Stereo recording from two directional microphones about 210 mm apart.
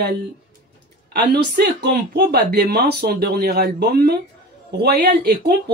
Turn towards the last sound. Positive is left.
turn(degrees=-50)  # may be behind; listen again after turning